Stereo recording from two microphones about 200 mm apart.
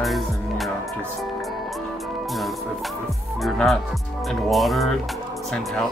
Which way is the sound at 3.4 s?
Centre (ahead or behind).